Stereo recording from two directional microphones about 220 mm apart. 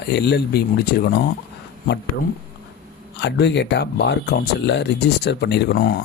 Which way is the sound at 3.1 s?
50° left (ahead or behind).